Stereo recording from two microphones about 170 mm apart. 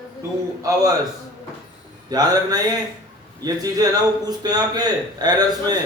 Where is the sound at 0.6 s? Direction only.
20° right (ahead or behind).